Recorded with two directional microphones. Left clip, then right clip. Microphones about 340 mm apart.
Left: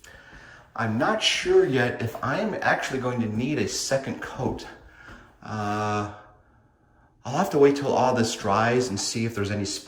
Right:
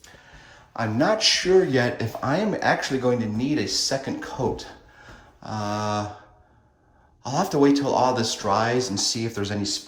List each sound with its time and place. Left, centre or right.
0.8 s speech: centre
7.2 s speech: centre